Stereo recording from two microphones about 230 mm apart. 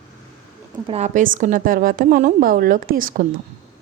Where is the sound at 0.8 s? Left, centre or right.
Right.